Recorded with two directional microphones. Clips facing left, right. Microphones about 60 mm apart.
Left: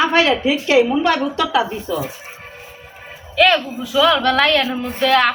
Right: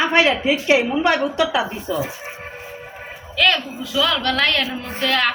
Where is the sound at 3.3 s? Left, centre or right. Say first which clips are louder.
Left 4 dB; centre.